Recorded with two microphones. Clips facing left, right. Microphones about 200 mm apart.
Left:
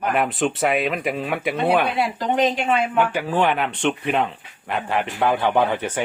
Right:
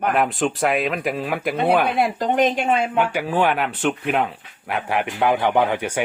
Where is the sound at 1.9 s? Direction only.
50° right (ahead or behind).